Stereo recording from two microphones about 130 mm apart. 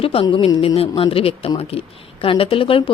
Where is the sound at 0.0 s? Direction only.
45° left (ahead or behind).